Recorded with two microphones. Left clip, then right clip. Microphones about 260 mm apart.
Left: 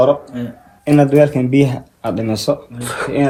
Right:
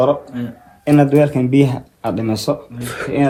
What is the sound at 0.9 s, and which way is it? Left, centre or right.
Speech, right.